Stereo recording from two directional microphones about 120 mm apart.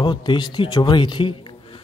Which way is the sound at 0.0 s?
40° left (ahead or behind).